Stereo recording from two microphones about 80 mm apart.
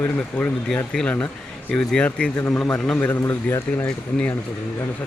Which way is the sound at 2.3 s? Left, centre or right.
Left.